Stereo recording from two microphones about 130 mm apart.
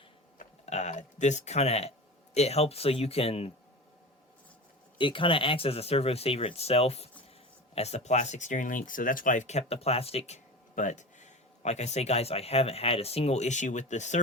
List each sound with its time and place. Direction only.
0.3 s a sound: 60° left (ahead or behind)
2.3 s speech: 55° left (ahead or behind)
4.9 s speech: 40° left (ahead or behind); by 14.2 s 65° left (ahead or behind)